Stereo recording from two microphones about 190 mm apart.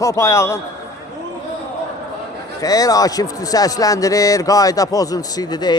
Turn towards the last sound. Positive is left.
turn(degrees=20)  # may be behind; listen again after turning